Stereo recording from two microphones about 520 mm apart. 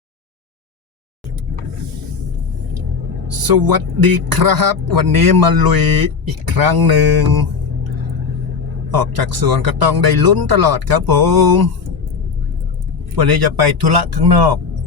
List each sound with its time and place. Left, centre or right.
3.3 s speech: right
8.9 s speech: right
13.1 s speech: right